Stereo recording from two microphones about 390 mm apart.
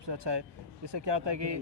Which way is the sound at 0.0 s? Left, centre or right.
Right.